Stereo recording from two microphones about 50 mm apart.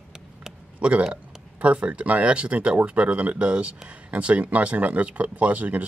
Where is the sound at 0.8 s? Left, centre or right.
Right.